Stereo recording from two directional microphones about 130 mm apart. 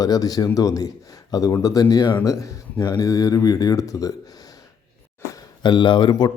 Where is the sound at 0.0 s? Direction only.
30° left (ahead or behind).